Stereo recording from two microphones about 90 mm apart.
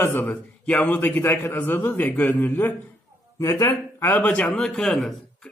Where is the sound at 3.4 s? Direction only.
40° left (ahead or behind).